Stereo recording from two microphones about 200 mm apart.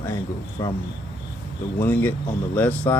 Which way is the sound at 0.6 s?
20° left (ahead or behind).